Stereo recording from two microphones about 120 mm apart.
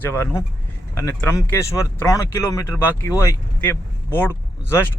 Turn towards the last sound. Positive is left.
turn(degrees=20)  # may be behind; listen again after turning